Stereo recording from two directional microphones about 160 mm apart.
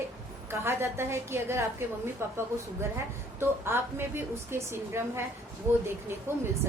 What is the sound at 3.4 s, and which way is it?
A woman's voice, 15° right (ahead or behind).